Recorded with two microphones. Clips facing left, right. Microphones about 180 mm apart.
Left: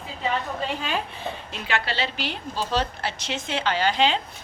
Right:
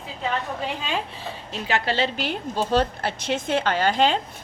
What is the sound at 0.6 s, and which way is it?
Speech, 20° right (ahead or behind).